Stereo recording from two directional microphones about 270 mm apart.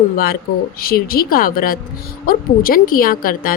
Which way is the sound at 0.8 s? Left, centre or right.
Left.